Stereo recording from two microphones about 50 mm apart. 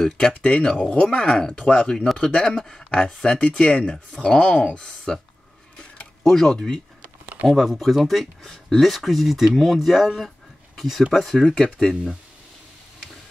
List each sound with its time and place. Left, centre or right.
0.4 s speech: centre
6.2 s speech: centre
7.4 s speech: centre
11.5 s speech: centre